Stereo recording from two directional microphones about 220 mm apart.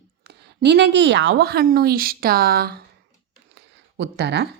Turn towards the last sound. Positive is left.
turn(degrees=-50)  # may be behind; listen again after turning